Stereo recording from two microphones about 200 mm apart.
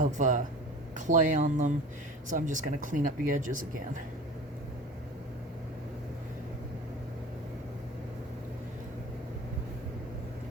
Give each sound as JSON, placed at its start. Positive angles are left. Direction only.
{"t": 0.0, "sound": "speech", "side_deg": -40}